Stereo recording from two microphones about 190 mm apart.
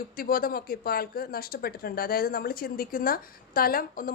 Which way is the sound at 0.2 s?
50° left (ahead or behind).